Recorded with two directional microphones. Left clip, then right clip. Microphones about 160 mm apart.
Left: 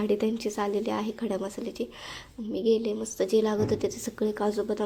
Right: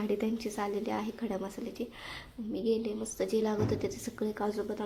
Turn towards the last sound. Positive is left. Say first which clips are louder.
# left 6 dB
turn(degrees=35)  # may be behind; listen again after turning